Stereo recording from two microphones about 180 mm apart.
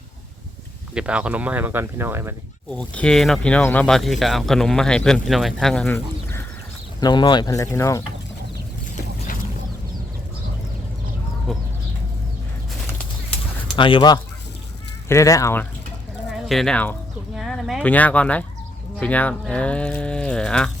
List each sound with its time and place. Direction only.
0.9 s speech: 5° right (ahead or behind)
2.7 s speech: 5° left (ahead or behind)
7.0 s speech: 25° left (ahead or behind)
9.0 s boat: 50° left (ahead or behind)
11.5 s chicken: centre (ahead or behind)
13.7 s speech: 30° left (ahead or behind)
16.3 s speech: centre (ahead or behind)
17.3 s a sound: centre (ahead or behind)
17.9 s speech: 10° left (ahead or behind)